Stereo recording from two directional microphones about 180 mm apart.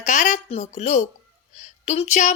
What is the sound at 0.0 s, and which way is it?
A woman's voice, 40° left (ahead or behind).